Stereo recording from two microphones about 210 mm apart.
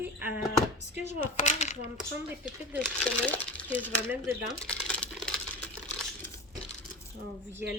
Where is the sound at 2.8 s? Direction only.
5° left (ahead or behind).